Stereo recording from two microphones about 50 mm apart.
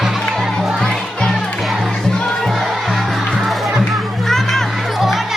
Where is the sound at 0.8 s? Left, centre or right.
Centre.